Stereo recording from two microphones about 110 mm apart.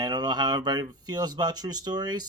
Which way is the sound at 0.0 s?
40° right (ahead or behind).